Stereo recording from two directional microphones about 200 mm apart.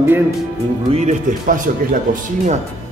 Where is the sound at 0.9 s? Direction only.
35° right (ahead or behind).